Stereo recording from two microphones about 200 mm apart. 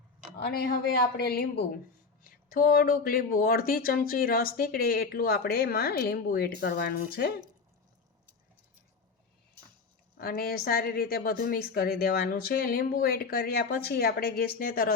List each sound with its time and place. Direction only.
0.3 s a woman's voice: 50° left (ahead or behind)
10.2 s speech: 50° left (ahead or behind)